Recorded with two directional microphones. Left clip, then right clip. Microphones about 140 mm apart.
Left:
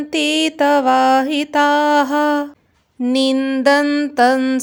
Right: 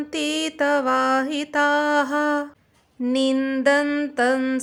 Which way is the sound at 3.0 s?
35° left (ahead or behind).